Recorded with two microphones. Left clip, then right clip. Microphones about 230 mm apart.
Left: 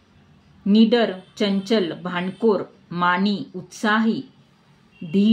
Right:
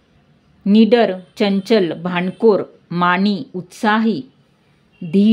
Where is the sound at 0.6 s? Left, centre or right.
Right.